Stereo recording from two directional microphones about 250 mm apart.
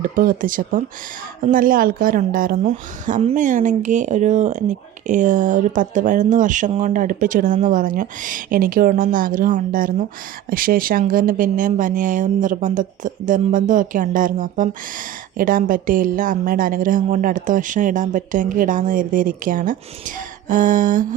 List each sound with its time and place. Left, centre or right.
0.0 s a woman's voice: right